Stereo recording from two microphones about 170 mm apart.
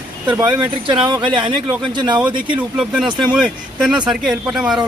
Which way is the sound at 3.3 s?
5° right (ahead or behind).